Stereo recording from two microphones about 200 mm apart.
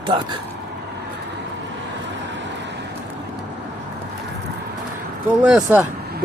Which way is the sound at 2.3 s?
65° right (ahead or behind).